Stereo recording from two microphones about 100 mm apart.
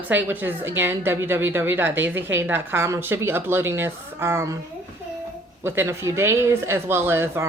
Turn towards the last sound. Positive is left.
turn(degrees=-25)  # may be behind; listen again after turning